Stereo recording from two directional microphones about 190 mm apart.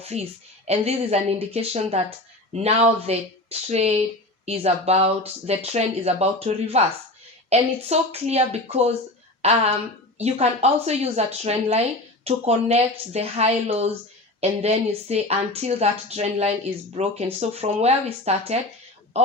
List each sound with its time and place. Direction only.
0.0 s a man's voice: 35° right (ahead or behind)